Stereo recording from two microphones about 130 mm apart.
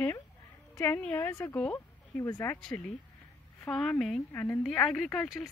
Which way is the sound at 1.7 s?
20° left (ahead or behind).